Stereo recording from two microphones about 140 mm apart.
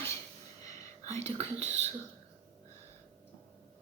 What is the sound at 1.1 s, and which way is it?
Speech, 50° right (ahead or behind).